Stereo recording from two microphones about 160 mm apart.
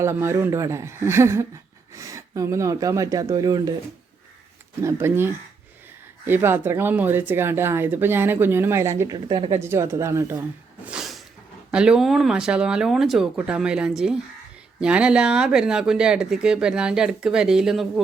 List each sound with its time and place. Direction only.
0.0 s speech: 15° right (ahead or behind)
4.8 s speech: 15° right (ahead or behind)
9.1 s speech: 30° right (ahead or behind)
9.6 s speech: 15° right (ahead or behind)
10.8 s a sound: 5° right (ahead or behind)
11.7 s speech: 5° right (ahead or behind)